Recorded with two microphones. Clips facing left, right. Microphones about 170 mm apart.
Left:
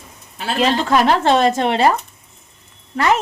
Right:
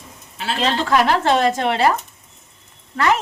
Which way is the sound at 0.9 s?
25° left (ahead or behind).